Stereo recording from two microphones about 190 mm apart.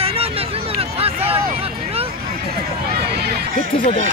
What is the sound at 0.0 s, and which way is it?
Hubbub, 30° right (ahead or behind).